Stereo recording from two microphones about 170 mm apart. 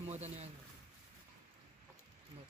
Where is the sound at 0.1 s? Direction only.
40° right (ahead or behind).